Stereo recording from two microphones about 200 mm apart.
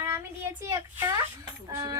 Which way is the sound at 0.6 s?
15° right (ahead or behind).